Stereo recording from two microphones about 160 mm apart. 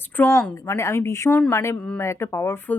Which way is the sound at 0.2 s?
20° left (ahead or behind).